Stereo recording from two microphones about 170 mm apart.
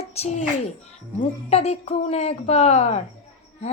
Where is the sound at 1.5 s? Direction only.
40° left (ahead or behind).